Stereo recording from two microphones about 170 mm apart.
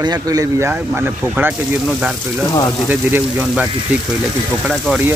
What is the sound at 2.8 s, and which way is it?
Speech, 10° right (ahead or behind).